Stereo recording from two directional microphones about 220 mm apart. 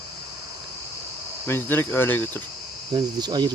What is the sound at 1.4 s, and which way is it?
Speech, 10° left (ahead or behind).